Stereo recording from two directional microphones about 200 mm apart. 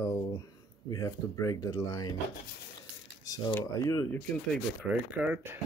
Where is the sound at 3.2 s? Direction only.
20° left (ahead or behind).